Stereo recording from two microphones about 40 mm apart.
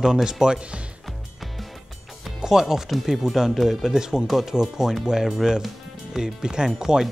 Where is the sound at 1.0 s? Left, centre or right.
Centre.